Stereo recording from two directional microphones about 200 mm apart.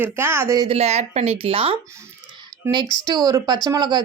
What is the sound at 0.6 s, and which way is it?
A woman's voice, 30° right (ahead or behind).